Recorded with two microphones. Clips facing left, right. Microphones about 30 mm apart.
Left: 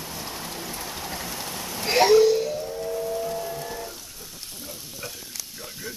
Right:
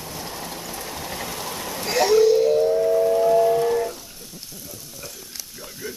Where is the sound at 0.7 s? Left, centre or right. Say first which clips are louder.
Right 2 dB; centre.